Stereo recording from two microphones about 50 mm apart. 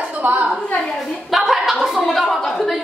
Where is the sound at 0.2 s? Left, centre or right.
Right.